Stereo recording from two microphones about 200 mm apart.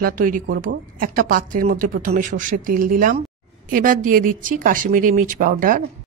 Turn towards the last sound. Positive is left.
turn(degrees=-45)  # may be behind; listen again after turning